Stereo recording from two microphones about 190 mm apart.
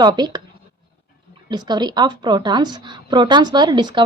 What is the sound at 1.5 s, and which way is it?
A woman's voice, 20° right (ahead or behind).